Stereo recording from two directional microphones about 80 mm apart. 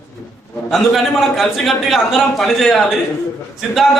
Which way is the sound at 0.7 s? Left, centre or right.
Centre.